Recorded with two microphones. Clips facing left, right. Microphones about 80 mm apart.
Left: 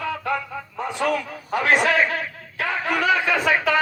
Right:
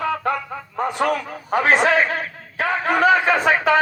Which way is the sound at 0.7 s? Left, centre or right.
Right.